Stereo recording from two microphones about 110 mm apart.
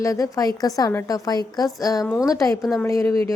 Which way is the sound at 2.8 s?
25° left (ahead or behind).